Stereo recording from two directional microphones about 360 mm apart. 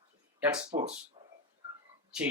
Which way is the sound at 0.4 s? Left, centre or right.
Centre.